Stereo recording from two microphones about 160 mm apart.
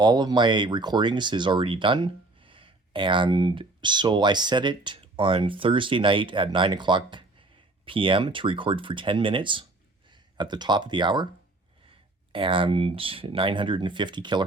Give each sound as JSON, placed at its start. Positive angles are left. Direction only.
{"t": 0.0, "sound": "speech", "side_deg": -25}